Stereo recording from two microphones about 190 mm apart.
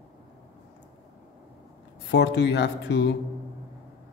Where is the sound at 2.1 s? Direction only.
60° left (ahead or behind).